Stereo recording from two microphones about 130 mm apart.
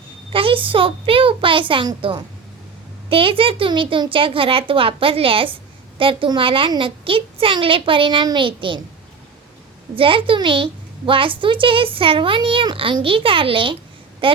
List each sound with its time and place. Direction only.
0.3 s a child's voice: 40° right (ahead or behind)
9.9 s a child's voice: 45° right (ahead or behind)